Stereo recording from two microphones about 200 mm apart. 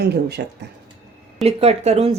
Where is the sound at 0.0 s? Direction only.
55° right (ahead or behind).